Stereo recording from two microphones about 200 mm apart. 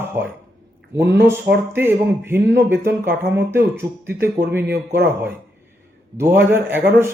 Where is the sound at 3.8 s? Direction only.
10° right (ahead or behind).